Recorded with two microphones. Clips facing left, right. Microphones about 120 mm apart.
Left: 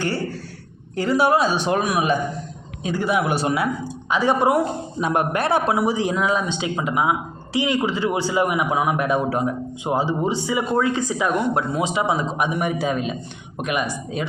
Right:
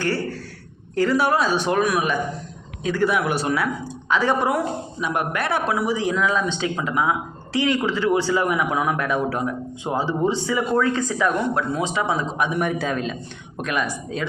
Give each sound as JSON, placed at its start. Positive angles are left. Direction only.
{"t": 0.9, "sound": "speech", "side_deg": 20}